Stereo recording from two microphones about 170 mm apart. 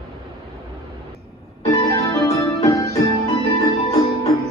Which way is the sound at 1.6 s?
20° left (ahead or behind).